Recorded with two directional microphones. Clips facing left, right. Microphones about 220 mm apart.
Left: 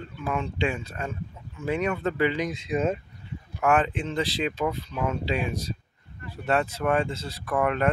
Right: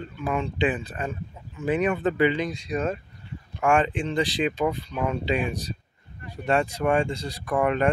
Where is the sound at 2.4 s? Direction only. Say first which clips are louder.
Left 1 dB; 20° left (ahead or behind).